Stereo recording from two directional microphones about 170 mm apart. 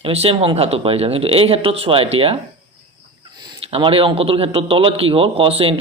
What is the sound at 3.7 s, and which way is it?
A man's voice, 30° right (ahead or behind).